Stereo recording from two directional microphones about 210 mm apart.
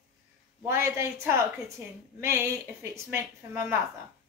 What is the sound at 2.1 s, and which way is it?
Speech, 15° right (ahead or behind).